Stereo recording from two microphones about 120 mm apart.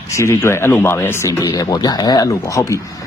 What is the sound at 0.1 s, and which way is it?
Speech, 25° left (ahead or behind).